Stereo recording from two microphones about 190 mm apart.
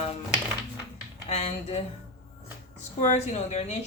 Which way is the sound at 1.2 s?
30° left (ahead or behind).